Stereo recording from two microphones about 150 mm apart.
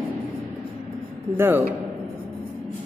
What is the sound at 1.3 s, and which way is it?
Speech, 15° right (ahead or behind).